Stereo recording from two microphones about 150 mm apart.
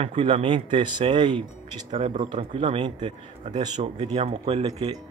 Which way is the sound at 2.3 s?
40° right (ahead or behind).